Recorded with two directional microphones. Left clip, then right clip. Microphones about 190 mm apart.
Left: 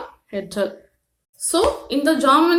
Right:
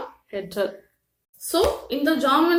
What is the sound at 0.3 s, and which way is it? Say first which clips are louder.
Speech: left 3 dB; 20° left (ahead or behind).